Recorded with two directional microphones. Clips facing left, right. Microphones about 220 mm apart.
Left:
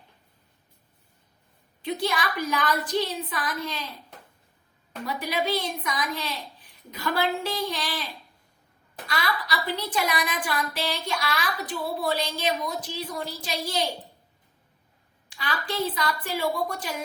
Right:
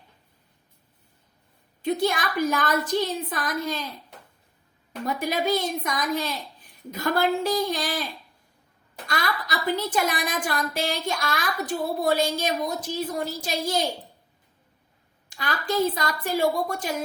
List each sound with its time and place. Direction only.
1.8 s a woman's voice: 45° right (ahead or behind)
5.0 s a woman's voice: 45° right (ahead or behind)
9.0 s a woman's voice: 45° right (ahead or behind)
15.3 s a woman's voice: 45° right (ahead or behind)